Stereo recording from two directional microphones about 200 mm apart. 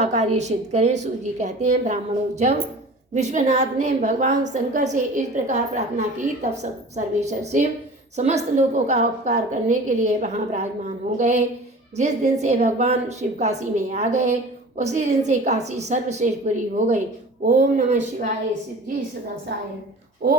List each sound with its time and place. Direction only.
0.0 s a woman's voice: 35° right (ahead or behind)